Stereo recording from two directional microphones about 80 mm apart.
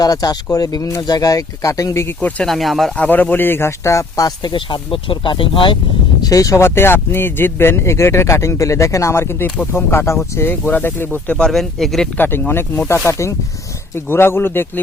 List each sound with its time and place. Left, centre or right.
0.0 s speech: left
2.4 s speech: centre
3.1 s speech: left
4.4 s speech: left
6.2 s speech: left
6.7 s speech: left
11.3 s speech: centre
12.1 s speech: left
13.1 s speech: left